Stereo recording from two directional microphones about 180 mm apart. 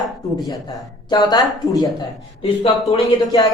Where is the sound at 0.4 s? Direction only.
20° left (ahead or behind).